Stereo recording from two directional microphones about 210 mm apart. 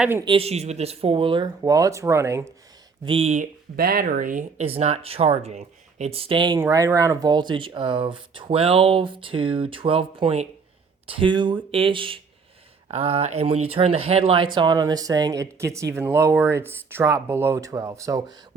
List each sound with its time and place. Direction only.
0.0 s speech: 10° right (ahead or behind)
0.3 s speech: 30° right (ahead or behind)
3.0 s speech: 25° right (ahead or behind)
3.8 s speech: 45° right (ahead or behind); by 18.3 s 15° right (ahead or behind)